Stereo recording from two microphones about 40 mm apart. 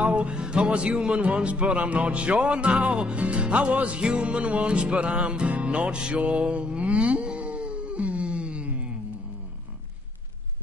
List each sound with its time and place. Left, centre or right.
0.0 s music: right
0.7 s speech: right